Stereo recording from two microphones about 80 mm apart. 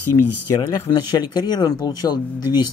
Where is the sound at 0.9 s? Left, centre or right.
Left.